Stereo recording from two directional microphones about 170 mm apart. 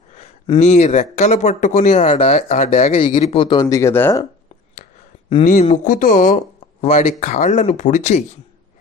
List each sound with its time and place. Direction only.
0.2 s speech: 35° left (ahead or behind); by 4.2 s 15° left (ahead or behind)
5.3 s speech: 50° left (ahead or behind)